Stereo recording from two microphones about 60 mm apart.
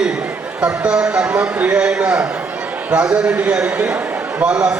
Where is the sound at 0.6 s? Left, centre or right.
Centre.